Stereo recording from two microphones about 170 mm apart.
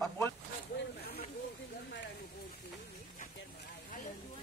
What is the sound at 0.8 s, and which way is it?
Speech, 65° left (ahead or behind).